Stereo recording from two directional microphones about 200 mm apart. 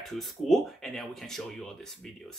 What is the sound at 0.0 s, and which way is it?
Speech, centre (ahead or behind).